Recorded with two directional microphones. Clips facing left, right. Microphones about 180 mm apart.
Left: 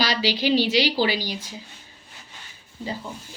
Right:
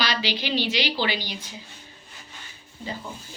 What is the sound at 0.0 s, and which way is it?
A woman's voice, 40° left (ahead or behind).